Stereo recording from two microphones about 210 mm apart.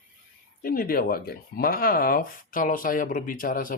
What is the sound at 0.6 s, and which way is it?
Speech, 45° left (ahead or behind).